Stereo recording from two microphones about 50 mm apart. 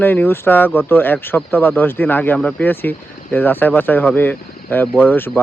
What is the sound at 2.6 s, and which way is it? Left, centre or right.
Speech, left.